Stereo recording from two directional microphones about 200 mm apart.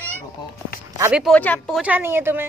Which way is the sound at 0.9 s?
10° right (ahead or behind).